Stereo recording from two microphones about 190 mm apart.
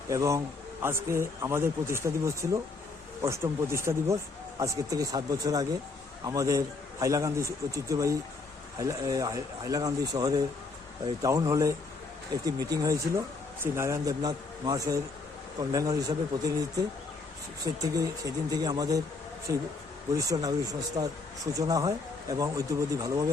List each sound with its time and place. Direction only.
0.1 s a man's voice: 15° right (ahead or behind)